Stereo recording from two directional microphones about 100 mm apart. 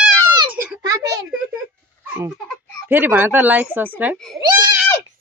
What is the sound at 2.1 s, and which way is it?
Babbling, 20° right (ahead or behind).